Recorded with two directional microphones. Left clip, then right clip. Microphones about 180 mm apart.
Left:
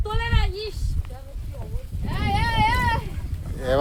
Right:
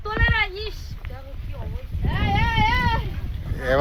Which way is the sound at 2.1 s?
35° right (ahead or behind).